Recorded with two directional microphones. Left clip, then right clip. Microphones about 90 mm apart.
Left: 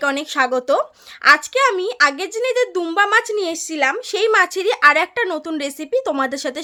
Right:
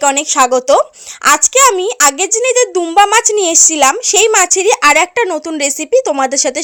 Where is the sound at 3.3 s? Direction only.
50° right (ahead or behind).